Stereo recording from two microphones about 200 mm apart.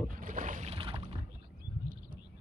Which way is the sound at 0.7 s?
25° right (ahead or behind).